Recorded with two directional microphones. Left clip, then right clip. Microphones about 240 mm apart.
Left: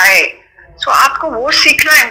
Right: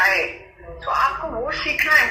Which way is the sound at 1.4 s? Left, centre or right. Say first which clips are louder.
Left 14 dB; left.